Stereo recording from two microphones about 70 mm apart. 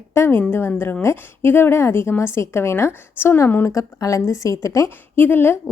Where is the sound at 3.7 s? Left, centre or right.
Left.